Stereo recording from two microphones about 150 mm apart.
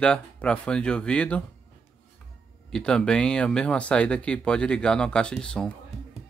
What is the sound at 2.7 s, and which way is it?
Speech, 5° left (ahead or behind).